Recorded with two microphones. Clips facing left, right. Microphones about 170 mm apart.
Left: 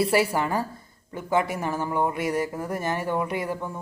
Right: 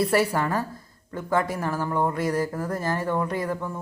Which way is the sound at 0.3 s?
10° left (ahead or behind).